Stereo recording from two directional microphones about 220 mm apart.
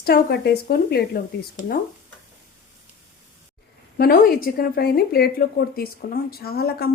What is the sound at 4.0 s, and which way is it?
A woman's voice, 45° left (ahead or behind).